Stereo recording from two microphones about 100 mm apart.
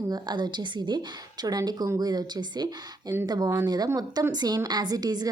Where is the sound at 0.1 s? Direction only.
45° right (ahead or behind).